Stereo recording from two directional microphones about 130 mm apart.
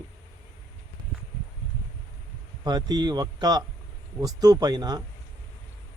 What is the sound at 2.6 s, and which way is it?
Speech, 30° right (ahead or behind).